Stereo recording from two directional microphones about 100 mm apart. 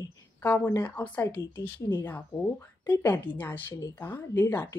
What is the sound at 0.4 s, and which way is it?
A woman's voice, 20° left (ahead or behind).